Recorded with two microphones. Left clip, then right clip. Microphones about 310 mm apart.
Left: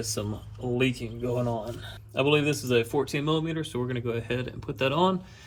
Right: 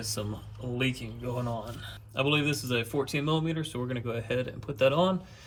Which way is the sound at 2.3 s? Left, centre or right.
Centre.